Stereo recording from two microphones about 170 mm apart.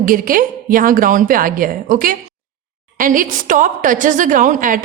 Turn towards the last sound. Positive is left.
turn(degrees=-50)  # may be behind; listen again after turning